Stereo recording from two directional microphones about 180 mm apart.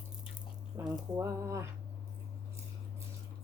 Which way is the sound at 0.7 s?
15° right (ahead or behind).